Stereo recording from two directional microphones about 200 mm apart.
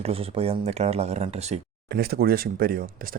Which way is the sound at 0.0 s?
30° right (ahead or behind).